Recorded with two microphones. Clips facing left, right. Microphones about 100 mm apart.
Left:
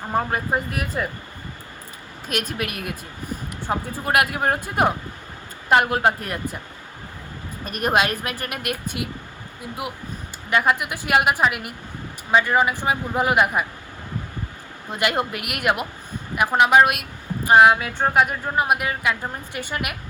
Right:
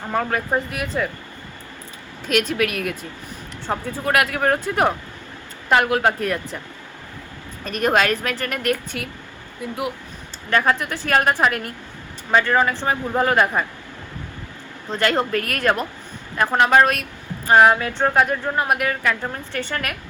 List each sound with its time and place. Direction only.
0.1 s speech: 25° left (ahead or behind)
2.2 s speech: 45° left (ahead or behind)
3.7 s a woman's voice: 15° left (ahead or behind)
5.7 s speech: 25° left (ahead or behind)
7.8 s a woman's voice: 15° left (ahead or behind)
10.5 s a woman's voice: 15° left (ahead or behind)
14.8 s a woman's voice: 15° left (ahead or behind)